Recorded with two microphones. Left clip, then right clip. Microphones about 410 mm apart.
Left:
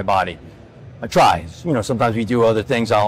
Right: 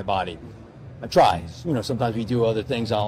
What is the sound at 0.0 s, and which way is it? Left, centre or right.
Speech, left.